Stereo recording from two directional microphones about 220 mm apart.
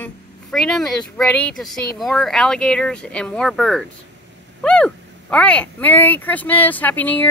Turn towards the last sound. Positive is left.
turn(degrees=10)  # may be behind; listen again after turning